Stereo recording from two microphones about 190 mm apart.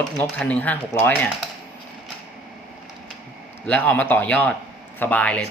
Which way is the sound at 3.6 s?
10° left (ahead or behind).